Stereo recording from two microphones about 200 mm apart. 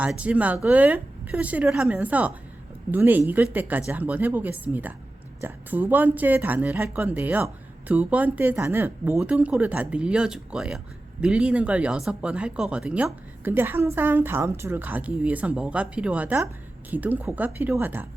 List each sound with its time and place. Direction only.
0.0 s speech: 5° right (ahead or behind)